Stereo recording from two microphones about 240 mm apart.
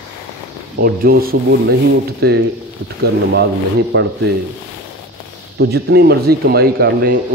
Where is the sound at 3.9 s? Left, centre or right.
Right.